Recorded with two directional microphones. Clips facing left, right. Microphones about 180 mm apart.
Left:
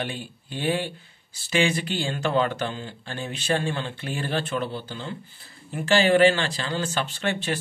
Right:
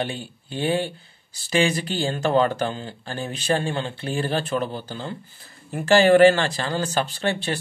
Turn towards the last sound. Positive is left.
turn(degrees=-35)  # may be behind; listen again after turning